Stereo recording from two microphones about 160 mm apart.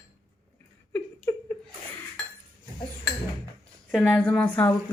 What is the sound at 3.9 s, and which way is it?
Speech, 5° left (ahead or behind).